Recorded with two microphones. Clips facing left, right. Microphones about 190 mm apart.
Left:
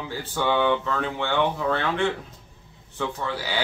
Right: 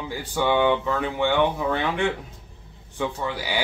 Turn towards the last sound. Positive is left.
turn(degrees=-15)  # may be behind; listen again after turning